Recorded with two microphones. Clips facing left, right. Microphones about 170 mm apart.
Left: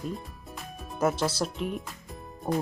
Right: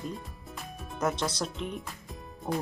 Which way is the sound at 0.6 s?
5° left (ahead or behind).